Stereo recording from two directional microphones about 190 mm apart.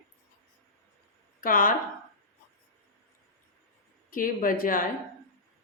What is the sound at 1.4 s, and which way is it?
Speech, 45° left (ahead or behind).